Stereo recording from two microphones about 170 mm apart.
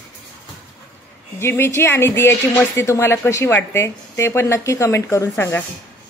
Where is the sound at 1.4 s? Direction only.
15° left (ahead or behind).